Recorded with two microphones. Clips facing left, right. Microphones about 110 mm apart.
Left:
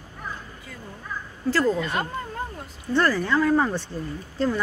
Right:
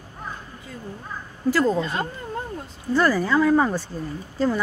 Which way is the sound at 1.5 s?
20° right (ahead or behind).